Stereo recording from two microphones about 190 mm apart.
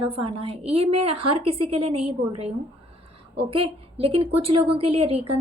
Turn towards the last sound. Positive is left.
turn(degrees=-30)  # may be behind; listen again after turning